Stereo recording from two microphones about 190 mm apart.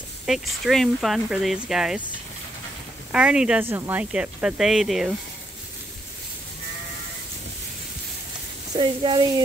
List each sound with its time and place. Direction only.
0.3 s speech: centre (ahead or behind)
3.1 s speech: 5° right (ahead or behind)
8.7 s speech: 25° right (ahead or behind)